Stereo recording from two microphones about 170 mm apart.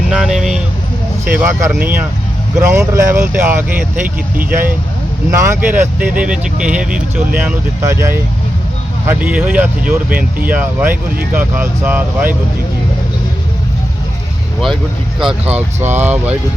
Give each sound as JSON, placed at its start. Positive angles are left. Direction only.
{"t": 0.1, "sound": "vehicle", "side_deg": 0}
{"t": 1.5, "sound": "speech", "side_deg": -15}
{"t": 5.3, "sound": "speech", "side_deg": -15}
{"t": 15.2, "sound": "speech", "side_deg": -5}